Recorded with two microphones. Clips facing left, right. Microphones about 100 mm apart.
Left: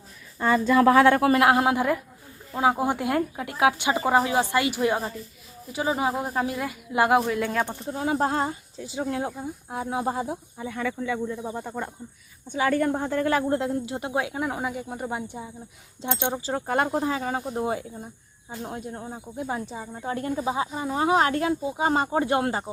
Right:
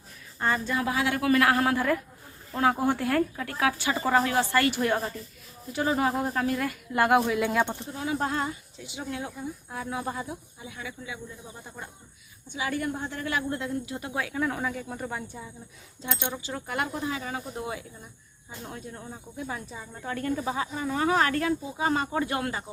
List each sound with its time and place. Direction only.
0.7 s speech: 90° left
0.9 s a woman's voice: 50° left (ahead or behind)
1.2 s speech: 25° left (ahead or behind); by 7.7 s 5° right (ahead or behind)
7.9 s speech: 40° left (ahead or behind)
10.6 s speech: 55° left (ahead or behind)
12.5 s a woman's voice: 45° left (ahead or behind); by 22.7 s 30° left (ahead or behind)